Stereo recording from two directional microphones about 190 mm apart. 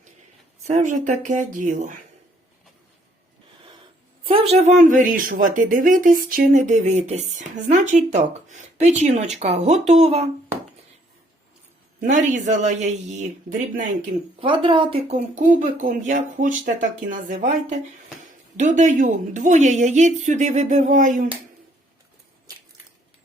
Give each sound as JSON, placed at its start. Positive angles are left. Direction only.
{"t": 0.6, "sound": "speech", "side_deg": -40}
{"t": 4.2, "sound": "speech", "side_deg": -30}
{"t": 11.9, "sound": "speech", "side_deg": -40}
{"t": 14.3, "sound": "speech", "side_deg": -25}